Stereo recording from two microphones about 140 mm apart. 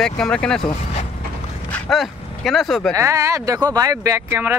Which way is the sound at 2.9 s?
20° right (ahead or behind).